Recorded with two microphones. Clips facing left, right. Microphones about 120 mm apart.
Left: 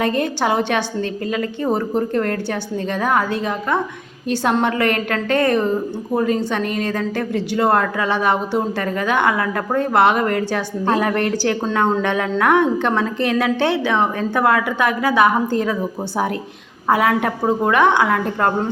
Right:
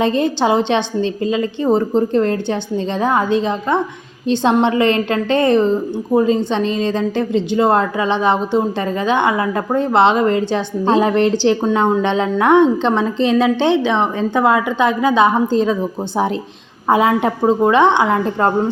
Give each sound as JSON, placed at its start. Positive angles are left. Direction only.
{"t": 0.0, "sound": "a woman's voice", "side_deg": -25}